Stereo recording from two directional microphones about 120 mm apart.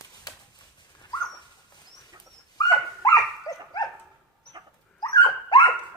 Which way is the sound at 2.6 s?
30° left (ahead or behind).